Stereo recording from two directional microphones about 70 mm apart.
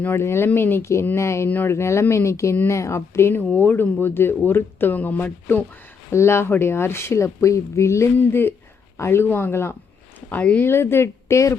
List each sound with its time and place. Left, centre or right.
0.0 s speech: left
1.5 s speech: left
1.7 s speech: left
6.1 s speech: left
10.2 s speech: left
10.6 s speech: left